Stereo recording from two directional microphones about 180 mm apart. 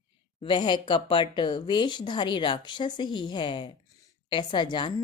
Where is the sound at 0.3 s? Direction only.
25° left (ahead or behind).